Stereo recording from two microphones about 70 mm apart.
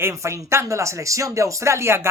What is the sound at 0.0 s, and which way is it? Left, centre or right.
Speech, right.